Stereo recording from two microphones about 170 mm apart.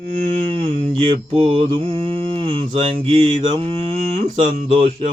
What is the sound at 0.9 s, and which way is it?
Mantra, 35° right (ahead or behind).